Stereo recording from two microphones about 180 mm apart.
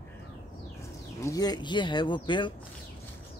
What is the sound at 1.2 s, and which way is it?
Speech, 20° left (ahead or behind).